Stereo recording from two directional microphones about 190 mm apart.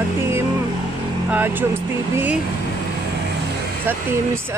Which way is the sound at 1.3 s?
10° right (ahead or behind).